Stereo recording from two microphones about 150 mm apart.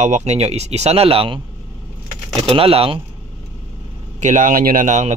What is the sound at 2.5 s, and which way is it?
Speech, 40° right (ahead or behind).